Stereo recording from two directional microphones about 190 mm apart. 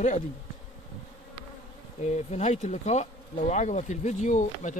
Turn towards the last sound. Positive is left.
turn(degrees=40)  # may be behind; listen again after turning